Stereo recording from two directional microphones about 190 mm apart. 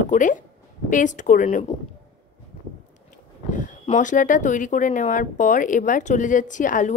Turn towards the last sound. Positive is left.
turn(degrees=40)  # may be behind; listen again after turning